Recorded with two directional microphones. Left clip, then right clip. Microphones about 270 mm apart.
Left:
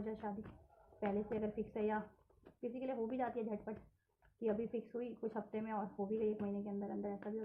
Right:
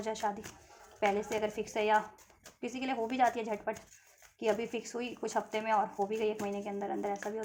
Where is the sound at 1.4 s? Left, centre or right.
Right.